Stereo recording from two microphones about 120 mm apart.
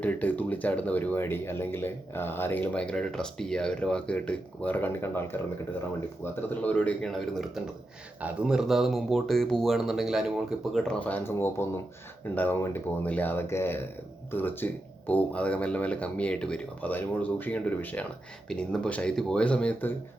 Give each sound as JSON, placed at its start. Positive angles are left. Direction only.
{"t": 0.0, "sound": "speech", "side_deg": 15}
{"t": 6.5, "sound": "speech", "side_deg": 10}
{"t": 7.1, "sound": "speech", "side_deg": 0}